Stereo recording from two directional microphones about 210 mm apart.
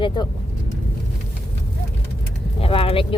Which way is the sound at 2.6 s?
25° left (ahead or behind).